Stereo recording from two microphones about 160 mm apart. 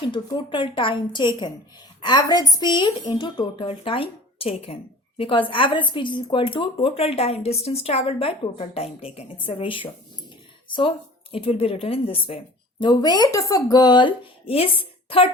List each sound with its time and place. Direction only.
0.0 s speech: 30° left (ahead or behind)
12.8 s speech: 25° left (ahead or behind)